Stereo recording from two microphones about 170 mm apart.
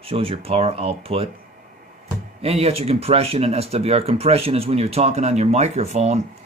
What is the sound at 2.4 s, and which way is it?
Speech, 35° right (ahead or behind).